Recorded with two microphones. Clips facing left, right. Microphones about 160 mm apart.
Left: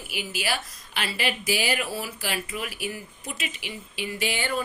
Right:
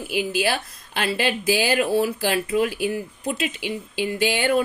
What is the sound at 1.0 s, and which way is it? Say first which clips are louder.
Speech: right 6 dB; 55° right (ahead or behind).